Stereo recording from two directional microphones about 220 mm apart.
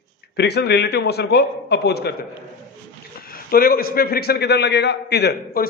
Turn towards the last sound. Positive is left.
turn(degrees=50)  # may be behind; listen again after turning